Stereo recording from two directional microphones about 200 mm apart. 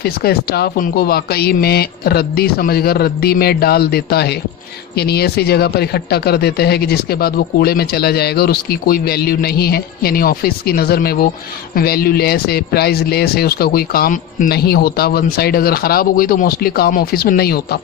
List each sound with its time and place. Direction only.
0.0 s speech: 50° left (ahead or behind)